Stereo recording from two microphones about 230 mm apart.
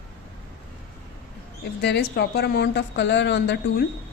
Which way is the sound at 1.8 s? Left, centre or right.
Left.